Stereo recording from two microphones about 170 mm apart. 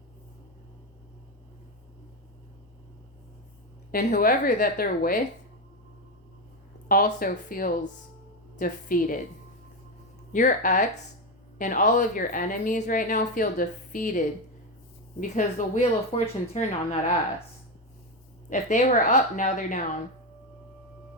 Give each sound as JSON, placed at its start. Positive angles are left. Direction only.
{"t": 3.9, "sound": "a woman's voice", "side_deg": 60}
{"t": 6.8, "sound": "a woman's voice", "side_deg": 55}
{"t": 10.3, "sound": "speech", "side_deg": 50}
{"t": 18.4, "sound": "speech", "side_deg": 45}